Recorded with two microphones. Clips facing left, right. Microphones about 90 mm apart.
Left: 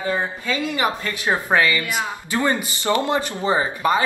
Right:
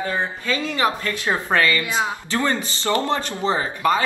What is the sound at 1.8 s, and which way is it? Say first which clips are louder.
Speech: right 2 dB; 20° right (ahead or behind).